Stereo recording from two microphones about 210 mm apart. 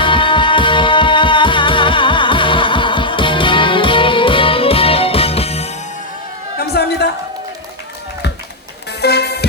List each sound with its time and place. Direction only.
0.0 s music: 25° left (ahead or behind)
6.6 s a sound: 50° left (ahead or behind)
8.9 s music: 50° left (ahead or behind)